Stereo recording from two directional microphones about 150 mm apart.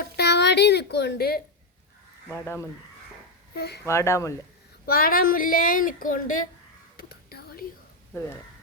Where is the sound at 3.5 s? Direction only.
90° left.